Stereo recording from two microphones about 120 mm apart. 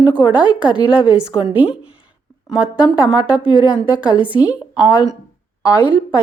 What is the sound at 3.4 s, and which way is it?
Speech, 45° left (ahead or behind).